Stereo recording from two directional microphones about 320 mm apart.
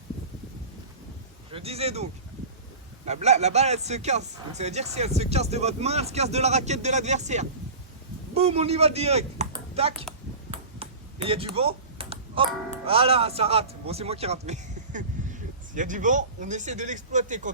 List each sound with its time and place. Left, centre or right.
1.5 s speech: centre
3.1 s speech: right
10.5 s a sound: centre
12.8 s a man's voice: centre